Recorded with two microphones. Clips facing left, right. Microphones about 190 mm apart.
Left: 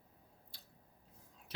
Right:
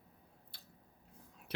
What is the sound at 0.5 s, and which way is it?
Squish, 60° right (ahead or behind).